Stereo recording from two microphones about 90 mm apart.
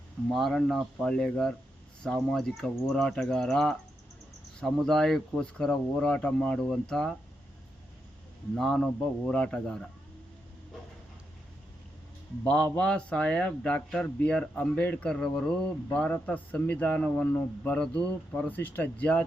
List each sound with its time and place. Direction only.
0.3 s speech: centre (ahead or behind)
8.5 s speech: 5° left (ahead or behind)
12.5 s speech: 15° left (ahead or behind)